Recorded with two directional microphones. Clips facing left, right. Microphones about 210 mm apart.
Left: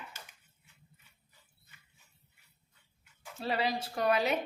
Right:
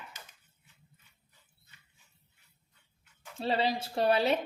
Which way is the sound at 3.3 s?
30° right (ahead or behind).